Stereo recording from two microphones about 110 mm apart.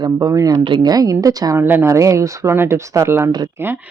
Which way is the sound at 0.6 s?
40° right (ahead or behind).